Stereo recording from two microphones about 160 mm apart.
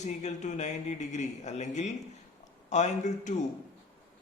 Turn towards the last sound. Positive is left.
turn(degrees=50)  # may be behind; listen again after turning